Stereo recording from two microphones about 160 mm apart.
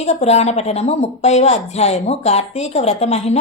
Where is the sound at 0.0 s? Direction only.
45° left (ahead or behind).